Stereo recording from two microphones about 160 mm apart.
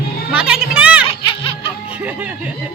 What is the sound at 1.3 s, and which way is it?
Music, 35° left (ahead or behind).